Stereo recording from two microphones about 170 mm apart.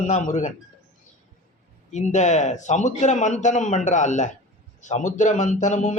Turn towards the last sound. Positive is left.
turn(degrees=45)  # may be behind; listen again after turning